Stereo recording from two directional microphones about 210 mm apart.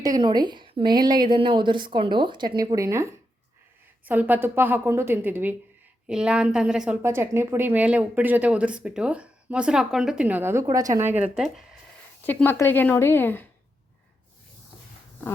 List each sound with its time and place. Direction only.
0.0 s a woman's voice: 20° right (ahead or behind); by 11.6 s centre (ahead or behind)
12.2 s a woman's voice: 10° left (ahead or behind)